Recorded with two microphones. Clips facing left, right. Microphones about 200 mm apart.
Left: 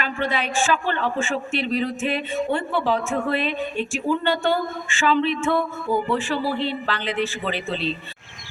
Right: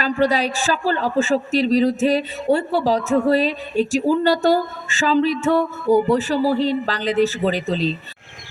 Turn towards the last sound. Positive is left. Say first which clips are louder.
# right 5 dB
turn(degrees=-40)  # may be behind; listen again after turning